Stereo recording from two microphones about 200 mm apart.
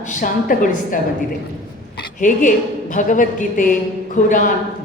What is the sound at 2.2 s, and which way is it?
A woman's voice, 40° left (ahead or behind).